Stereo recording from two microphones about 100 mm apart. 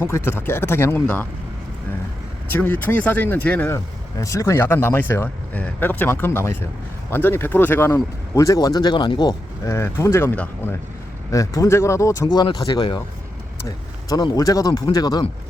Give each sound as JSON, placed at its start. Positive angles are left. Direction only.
{"t": 0.0, "sound": "speech", "side_deg": 20}
{"t": 2.5, "sound": "speech", "side_deg": 20}
{"t": 4.2, "sound": "speech", "side_deg": 30}
{"t": 8.4, "sound": "speech", "side_deg": 35}
{"t": 9.6, "sound": "speech", "side_deg": 30}
{"t": 12.4, "sound": "speech", "side_deg": 45}